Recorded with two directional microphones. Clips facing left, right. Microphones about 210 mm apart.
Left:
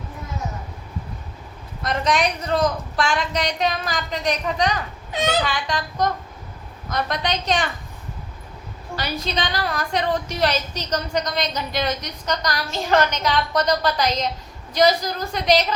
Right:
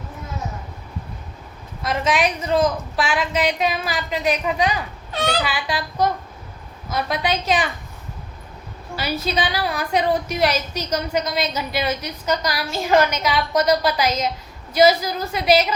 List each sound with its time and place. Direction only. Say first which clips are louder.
1.8 s a woman's voice: right 1 dB; 5° right (ahead or behind)
5.1 s a child's voice: left 1 dB; 20° left (ahead or behind)
5.4 s a woman's voice: even; 5° right (ahead or behind)
9.0 s a woman's voice: right 3 dB; 5° right (ahead or behind)